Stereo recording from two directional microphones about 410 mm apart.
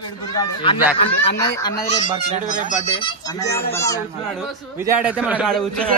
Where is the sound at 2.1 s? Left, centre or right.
Centre.